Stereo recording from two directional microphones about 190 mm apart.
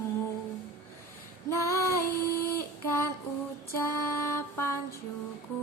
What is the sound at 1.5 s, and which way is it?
Female singing, 15° left (ahead or behind).